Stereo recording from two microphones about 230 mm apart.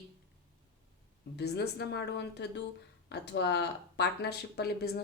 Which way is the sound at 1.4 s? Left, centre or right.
Left.